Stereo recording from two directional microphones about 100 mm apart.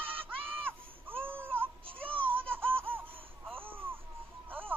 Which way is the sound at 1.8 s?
65° right (ahead or behind).